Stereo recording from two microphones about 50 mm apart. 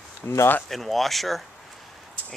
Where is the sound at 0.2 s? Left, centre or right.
Left.